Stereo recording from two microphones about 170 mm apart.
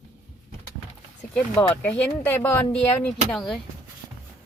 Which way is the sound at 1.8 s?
10° left (ahead or behind).